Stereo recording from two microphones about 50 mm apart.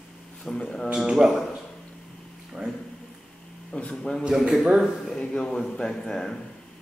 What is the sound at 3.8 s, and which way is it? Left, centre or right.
Speech, centre.